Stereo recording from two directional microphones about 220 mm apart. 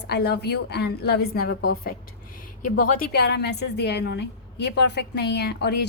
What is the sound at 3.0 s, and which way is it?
A woman's voice, 50° left (ahead or behind).